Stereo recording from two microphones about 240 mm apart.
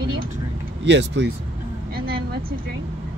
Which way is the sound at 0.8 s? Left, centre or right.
Right.